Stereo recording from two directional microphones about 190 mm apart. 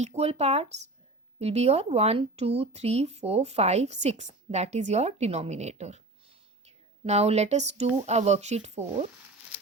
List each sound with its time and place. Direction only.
0.0 s speech: 35° right (ahead or behind)